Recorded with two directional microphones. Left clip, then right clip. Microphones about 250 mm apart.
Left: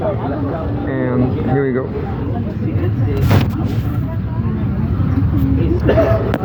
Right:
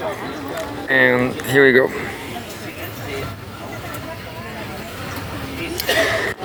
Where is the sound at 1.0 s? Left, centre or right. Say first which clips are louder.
Right 5 dB; right.